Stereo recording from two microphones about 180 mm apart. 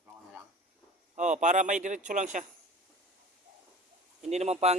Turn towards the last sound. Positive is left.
turn(degrees=-35)  # may be behind; listen again after turning